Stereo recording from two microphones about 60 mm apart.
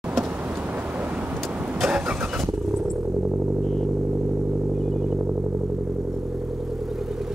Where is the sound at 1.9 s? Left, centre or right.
Centre.